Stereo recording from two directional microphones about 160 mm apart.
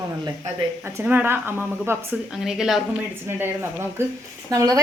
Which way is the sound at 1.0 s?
15° right (ahead or behind).